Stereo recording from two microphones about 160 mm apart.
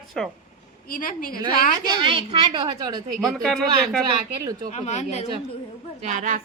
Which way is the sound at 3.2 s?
Centre (ahead or behind).